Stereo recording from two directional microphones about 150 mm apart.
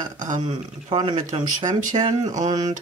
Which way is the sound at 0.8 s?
35° right (ahead or behind).